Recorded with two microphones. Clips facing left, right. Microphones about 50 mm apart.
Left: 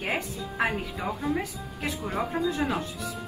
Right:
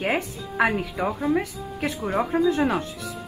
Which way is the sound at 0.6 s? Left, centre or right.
Right.